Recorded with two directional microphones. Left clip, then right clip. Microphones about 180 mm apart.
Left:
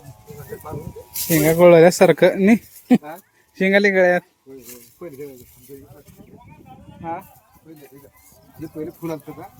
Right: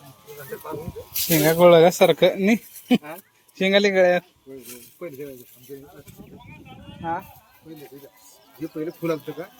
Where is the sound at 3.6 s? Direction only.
35° left (ahead or behind).